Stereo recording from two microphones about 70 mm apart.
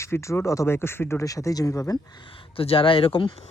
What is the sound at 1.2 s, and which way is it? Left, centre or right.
Speech, left.